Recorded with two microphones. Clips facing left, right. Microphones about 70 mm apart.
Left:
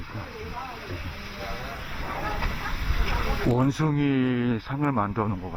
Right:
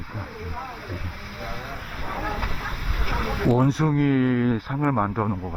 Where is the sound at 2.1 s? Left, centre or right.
Centre.